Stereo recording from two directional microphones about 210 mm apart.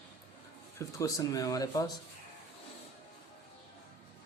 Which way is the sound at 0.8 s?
15° left (ahead or behind).